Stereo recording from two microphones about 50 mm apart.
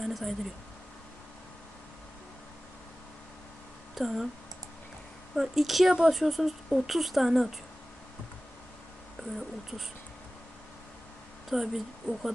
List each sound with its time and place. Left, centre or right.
0.0 s speech: centre
3.9 s speech: centre
5.3 s speech: centre
5.9 s speech: centre
6.1 s speech: centre
11.4 s speech: centre